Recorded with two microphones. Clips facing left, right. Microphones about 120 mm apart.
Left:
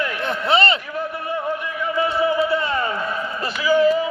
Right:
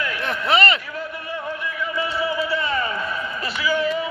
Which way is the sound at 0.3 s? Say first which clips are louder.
Left 1 dB; 30° left (ahead or behind).